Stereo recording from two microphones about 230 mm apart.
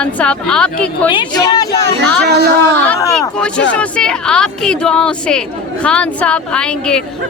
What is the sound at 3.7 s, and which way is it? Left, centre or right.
Speech, centre.